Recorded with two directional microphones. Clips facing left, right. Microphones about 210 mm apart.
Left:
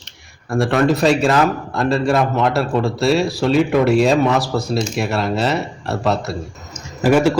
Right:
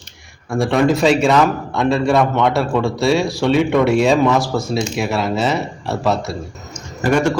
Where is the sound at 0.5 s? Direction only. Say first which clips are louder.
Right 1 dB; centre (ahead or behind).